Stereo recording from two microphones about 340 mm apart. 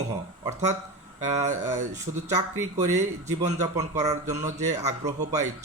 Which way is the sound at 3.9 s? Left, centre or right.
Centre.